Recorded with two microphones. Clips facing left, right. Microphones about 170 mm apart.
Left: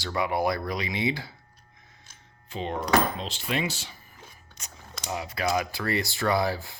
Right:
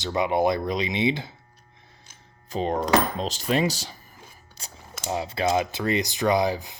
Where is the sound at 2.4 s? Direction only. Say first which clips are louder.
Right 5 dB; 40° right (ahead or behind).